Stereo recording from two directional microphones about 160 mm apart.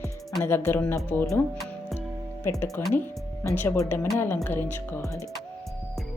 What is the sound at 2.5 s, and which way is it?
A woman's voice, 15° left (ahead or behind).